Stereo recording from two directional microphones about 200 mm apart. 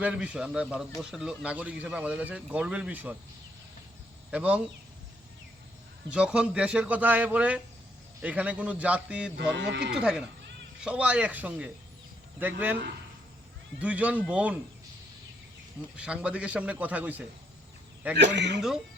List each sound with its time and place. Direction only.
0.0 s speech: 5° right (ahead or behind)
4.3 s speech: 5° right (ahead or behind)
6.1 s speech: 5° right (ahead or behind)
9.6 s speech: 60° right (ahead or behind)
9.9 s speech: 5° right (ahead or behind)
16.0 s speech: 5° right (ahead or behind)
18.2 s speech: 60° right (ahead or behind)